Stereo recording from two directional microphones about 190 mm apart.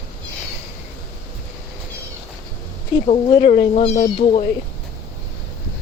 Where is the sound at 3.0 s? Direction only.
30° left (ahead or behind).